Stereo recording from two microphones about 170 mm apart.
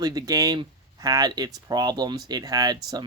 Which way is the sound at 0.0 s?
20° right (ahead or behind).